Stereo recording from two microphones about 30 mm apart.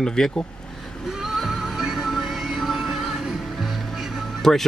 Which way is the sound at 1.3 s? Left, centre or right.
Centre.